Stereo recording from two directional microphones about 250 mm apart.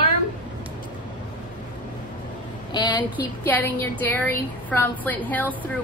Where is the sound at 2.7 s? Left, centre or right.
Centre.